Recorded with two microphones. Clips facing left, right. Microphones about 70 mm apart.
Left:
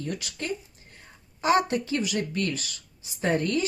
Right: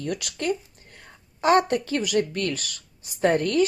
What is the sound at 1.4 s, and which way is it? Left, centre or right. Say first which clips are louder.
Speech: right 3 dB; right.